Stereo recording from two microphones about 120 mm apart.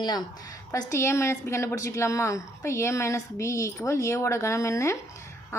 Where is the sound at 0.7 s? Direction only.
25° left (ahead or behind).